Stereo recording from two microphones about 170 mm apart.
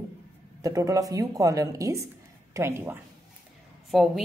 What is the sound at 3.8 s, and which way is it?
Speech, centre (ahead or behind).